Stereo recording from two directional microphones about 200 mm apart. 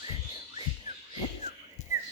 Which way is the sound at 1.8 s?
35° left (ahead or behind).